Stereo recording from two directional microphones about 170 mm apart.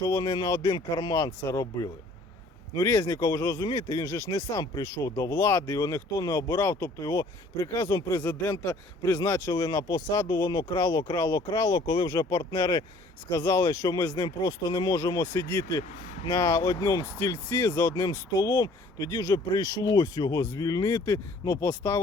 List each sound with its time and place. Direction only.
0.0 s speech: 25° left (ahead or behind)